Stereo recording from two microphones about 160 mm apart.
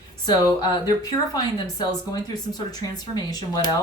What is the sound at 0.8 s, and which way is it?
Speech, 25° left (ahead or behind).